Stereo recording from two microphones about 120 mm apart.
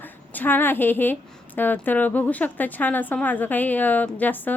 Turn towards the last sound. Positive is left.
turn(degrees=15)  # may be behind; listen again after turning